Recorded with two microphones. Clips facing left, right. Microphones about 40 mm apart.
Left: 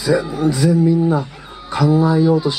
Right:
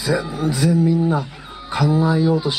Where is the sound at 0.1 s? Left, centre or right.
Centre.